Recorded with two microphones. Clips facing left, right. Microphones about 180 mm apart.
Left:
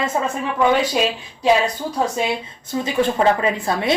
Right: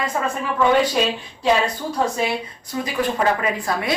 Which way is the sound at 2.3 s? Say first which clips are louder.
Left 1 dB; 25° left (ahead or behind).